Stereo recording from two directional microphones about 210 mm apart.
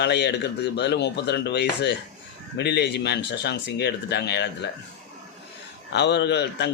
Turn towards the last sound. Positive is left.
turn(degrees=55)  # may be behind; listen again after turning